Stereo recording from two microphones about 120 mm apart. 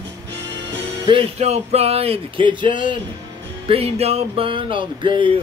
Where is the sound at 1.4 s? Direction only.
60° right (ahead or behind); by 2.9 s 45° right (ahead or behind).